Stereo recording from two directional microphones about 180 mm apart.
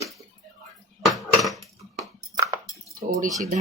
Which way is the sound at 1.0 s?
Centre (ahead or behind).